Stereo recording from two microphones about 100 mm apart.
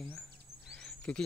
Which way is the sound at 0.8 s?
10° left (ahead or behind).